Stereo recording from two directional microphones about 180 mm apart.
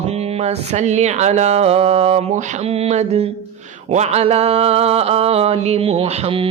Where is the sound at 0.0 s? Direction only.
35° right (ahead or behind).